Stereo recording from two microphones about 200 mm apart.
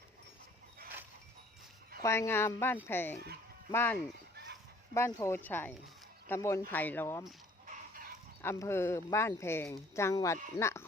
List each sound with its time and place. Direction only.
2.0 s speech: 15° left (ahead or behind)
4.9 s speech: 15° left (ahead or behind)
7.7 s chicken: 45° right (ahead or behind)
8.4 s speech: 15° left (ahead or behind)